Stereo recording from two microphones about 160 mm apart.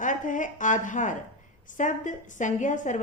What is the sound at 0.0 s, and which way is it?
A woman's voice, 55° left (ahead or behind).